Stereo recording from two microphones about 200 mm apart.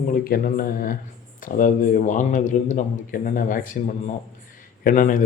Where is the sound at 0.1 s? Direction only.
45° left (ahead or behind).